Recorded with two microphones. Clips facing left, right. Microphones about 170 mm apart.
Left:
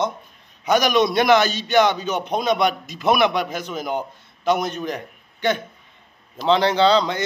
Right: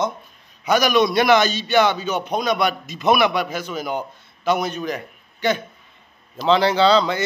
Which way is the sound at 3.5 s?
20° left (ahead or behind).